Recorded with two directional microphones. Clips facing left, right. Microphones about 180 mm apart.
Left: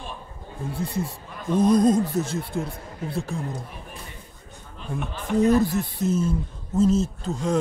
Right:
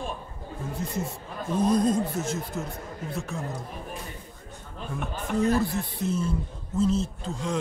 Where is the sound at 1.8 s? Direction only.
40° left (ahead or behind).